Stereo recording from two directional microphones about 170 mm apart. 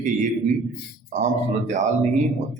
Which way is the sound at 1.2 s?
45° right (ahead or behind).